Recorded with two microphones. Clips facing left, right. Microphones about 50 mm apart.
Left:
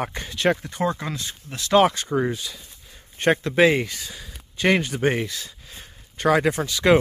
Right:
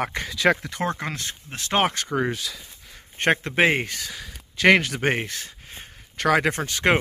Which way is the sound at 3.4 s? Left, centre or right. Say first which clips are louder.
Left 2 dB; right.